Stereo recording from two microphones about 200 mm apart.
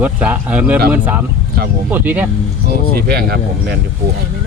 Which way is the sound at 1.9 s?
10° right (ahead or behind).